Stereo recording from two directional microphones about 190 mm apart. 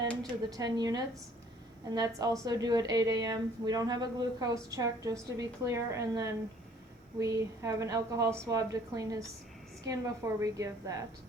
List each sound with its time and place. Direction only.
0.5 s a woman's voice: 20° right (ahead or behind)